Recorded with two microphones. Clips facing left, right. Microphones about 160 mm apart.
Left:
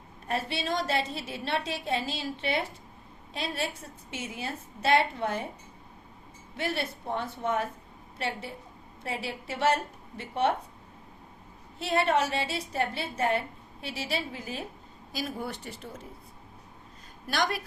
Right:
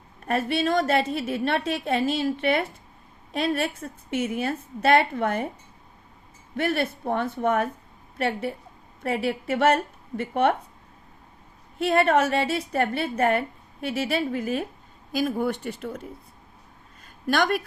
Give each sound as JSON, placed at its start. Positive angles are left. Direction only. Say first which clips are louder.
{"t": 0.3, "sound": "a woman's voice", "louder": "right 7 dB", "side_deg": -55}
{"t": 6.6, "sound": "a woman's voice", "louder": "right 7 dB", "side_deg": -55}
{"t": 11.8, "sound": "a woman's voice", "louder": "right 6 dB", "side_deg": -55}
{"t": 17.2, "sound": "a woman's voice", "louder": "right 7 dB", "side_deg": -55}